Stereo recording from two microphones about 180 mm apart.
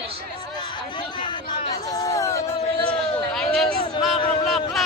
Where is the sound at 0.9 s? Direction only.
25° left (ahead or behind).